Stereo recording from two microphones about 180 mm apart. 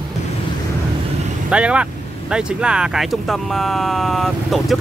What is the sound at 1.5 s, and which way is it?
Speech, 5° right (ahead or behind).